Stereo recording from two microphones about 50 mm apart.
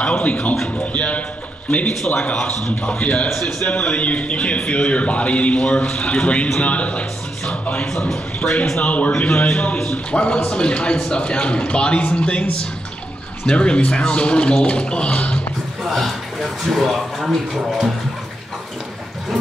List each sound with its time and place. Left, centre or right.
0.0 s a man's voice: left
7.9 s a man's voice: centre
8.8 s a man's voice: left
15.9 s speech: centre